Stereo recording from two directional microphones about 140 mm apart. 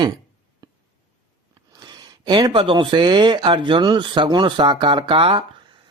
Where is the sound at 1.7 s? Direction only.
30° right (ahead or behind).